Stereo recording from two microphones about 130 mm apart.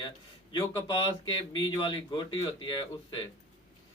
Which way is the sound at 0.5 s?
35° left (ahead or behind).